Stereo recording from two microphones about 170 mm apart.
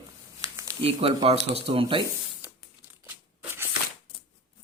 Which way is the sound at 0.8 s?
35° right (ahead or behind).